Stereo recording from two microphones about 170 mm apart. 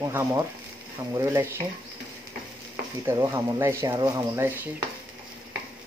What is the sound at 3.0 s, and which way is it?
Speech, 15° right (ahead or behind).